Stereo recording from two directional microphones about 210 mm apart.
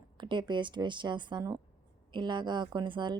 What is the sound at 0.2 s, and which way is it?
A woman's voice, 20° right (ahead or behind).